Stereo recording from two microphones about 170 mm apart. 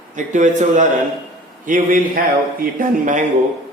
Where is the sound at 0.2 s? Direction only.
45° right (ahead or behind).